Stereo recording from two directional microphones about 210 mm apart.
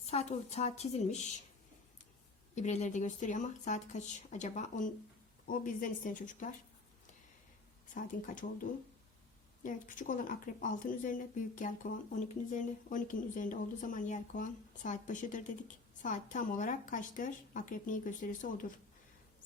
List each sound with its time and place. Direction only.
0.0 s speech: 30° left (ahead or behind)
2.6 s speech: 35° left (ahead or behind)
9.6 s speech: 40° left (ahead or behind)